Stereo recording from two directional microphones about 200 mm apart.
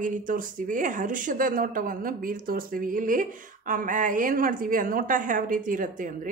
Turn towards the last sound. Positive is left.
turn(degrees=-40)  # may be behind; listen again after turning